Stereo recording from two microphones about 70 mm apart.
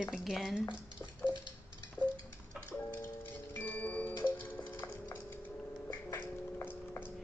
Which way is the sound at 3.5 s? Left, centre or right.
Left.